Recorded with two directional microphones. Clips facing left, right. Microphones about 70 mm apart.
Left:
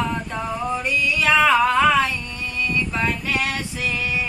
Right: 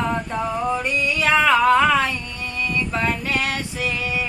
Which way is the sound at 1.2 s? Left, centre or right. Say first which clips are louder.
Even; right.